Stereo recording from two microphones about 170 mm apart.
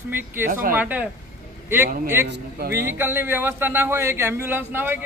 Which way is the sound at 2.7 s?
15° right (ahead or behind).